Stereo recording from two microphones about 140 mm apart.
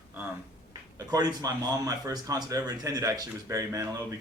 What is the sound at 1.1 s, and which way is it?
Speech, 25° right (ahead or behind).